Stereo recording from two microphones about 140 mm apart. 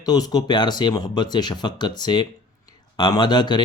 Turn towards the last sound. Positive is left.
turn(degrees=30)  # may be behind; listen again after turning